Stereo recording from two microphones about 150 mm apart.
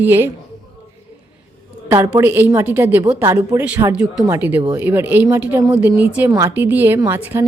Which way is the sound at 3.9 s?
5° right (ahead or behind).